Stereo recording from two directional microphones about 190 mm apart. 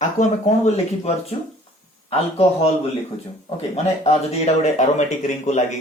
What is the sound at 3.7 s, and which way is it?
Speech, 35° left (ahead or behind).